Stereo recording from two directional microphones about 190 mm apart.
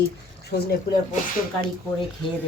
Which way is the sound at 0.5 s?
45° left (ahead or behind).